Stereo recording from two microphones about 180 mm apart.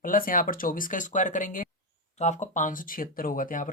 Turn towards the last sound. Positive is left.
turn(degrees=50)  # may be behind; listen again after turning